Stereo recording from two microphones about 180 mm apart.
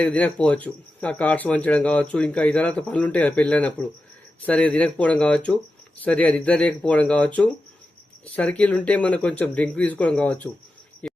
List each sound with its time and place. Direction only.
0.0 s speech: 5° left (ahead or behind)
11.0 s cricket: 5° left (ahead or behind)